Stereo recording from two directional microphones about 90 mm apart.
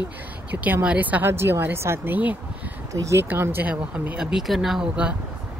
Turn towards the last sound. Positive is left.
turn(degrees=-5)  # may be behind; listen again after turning